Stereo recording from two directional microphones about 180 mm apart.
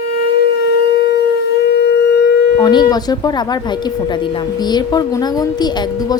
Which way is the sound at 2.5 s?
25° left (ahead or behind).